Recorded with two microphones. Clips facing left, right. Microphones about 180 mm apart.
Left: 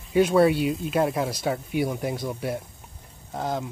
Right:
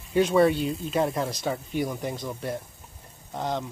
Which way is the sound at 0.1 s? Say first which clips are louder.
Left 2 dB; 5° left (ahead or behind).